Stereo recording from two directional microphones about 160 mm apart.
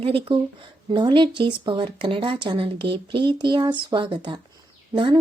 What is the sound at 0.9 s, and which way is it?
A woman's voice, 30° right (ahead or behind).